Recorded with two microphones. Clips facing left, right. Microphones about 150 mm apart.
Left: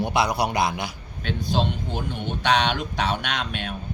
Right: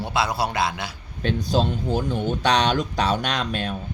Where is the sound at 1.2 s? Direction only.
40° right (ahead or behind).